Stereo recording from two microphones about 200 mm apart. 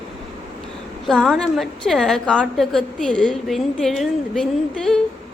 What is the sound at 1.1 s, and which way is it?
A woman's voice, centre (ahead or behind).